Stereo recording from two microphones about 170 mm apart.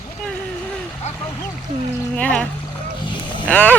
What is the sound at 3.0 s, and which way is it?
Boat, 30° left (ahead or behind).